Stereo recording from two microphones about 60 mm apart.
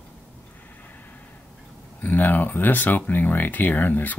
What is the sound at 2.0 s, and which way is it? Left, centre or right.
Speech, left.